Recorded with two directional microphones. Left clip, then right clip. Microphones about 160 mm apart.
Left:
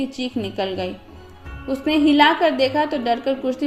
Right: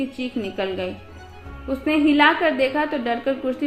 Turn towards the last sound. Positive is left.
turn(degrees=45)  # may be behind; listen again after turning